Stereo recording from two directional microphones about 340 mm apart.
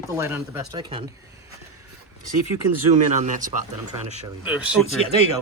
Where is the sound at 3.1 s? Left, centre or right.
Right.